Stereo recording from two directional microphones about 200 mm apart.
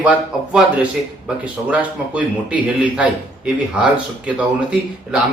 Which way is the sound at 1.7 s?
5° right (ahead or behind).